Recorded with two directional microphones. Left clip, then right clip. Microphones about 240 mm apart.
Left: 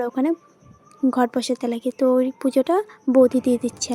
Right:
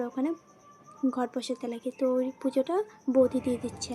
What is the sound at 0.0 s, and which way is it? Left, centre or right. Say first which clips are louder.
Speech: left 9 dB; left.